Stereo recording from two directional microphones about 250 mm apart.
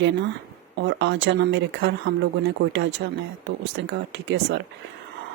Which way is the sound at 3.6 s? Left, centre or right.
Right.